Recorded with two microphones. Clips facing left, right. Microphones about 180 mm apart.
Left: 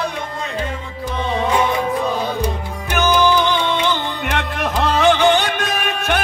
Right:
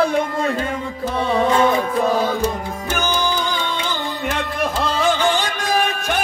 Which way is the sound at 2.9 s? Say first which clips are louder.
Left 6 dB; 65° left (ahead or behind).